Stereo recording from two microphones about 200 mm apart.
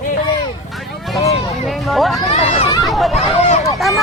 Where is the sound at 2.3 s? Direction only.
30° left (ahead or behind).